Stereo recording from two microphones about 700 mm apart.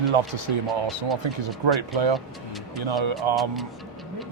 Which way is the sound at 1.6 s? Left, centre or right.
Right.